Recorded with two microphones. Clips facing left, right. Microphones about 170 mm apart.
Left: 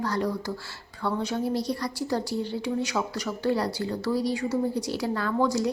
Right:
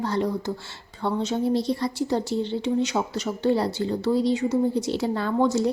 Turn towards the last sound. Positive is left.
turn(degrees=-25)  # may be behind; listen again after turning